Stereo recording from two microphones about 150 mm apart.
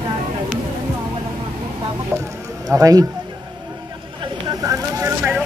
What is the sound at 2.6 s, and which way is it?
Speech, 25° right (ahead or behind).